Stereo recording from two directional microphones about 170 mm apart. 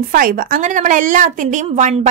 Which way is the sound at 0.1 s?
55° right (ahead or behind).